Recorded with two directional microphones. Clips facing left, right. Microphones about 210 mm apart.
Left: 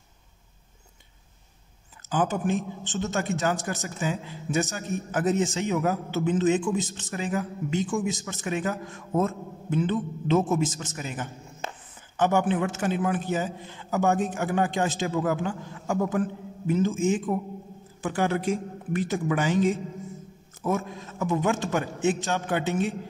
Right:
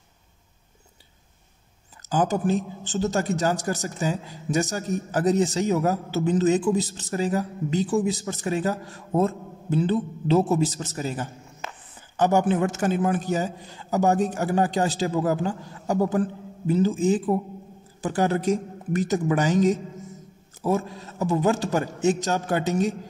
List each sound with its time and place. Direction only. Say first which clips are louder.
2.0 s a man's voice: right 3 dB; 40° right (ahead or behind)